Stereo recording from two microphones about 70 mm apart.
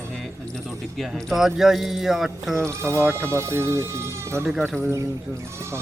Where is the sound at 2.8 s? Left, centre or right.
Right.